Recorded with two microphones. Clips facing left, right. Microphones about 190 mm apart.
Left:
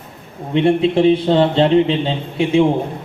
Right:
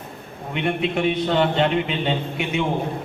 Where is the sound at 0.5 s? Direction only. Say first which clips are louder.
Left 9 dB; 30° left (ahead or behind).